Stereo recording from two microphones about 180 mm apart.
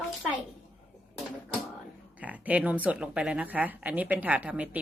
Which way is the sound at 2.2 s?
10° right (ahead or behind).